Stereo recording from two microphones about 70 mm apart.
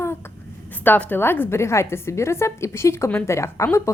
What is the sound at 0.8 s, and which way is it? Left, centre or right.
A woman's voice, left.